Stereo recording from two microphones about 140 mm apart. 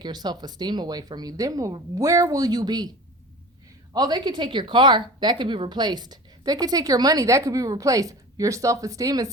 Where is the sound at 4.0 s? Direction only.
30° right (ahead or behind).